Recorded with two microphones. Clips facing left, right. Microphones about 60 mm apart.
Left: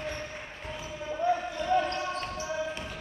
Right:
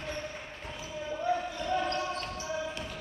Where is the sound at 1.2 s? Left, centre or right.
Left.